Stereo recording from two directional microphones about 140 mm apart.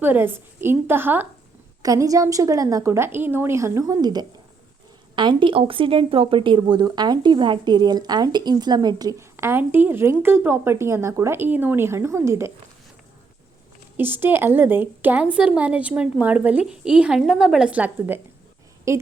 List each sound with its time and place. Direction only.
0.0 s a woman's voice: 15° right (ahead or behind)
1.8 s speech: 25° right (ahead or behind)
13.9 s a woman's voice: 15° right (ahead or behind)